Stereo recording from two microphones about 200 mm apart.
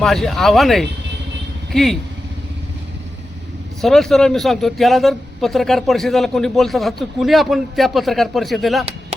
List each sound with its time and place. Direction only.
0.0 s a man's voice: centre (ahead or behind)
3.8 s a man's voice: centre (ahead or behind)
8.8 s a sound: 30° right (ahead or behind)